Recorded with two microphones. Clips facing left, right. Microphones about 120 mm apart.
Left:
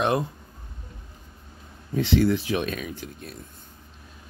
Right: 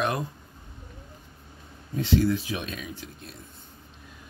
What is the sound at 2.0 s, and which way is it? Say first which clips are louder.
Speech: left 2 dB; 75° left (ahead or behind).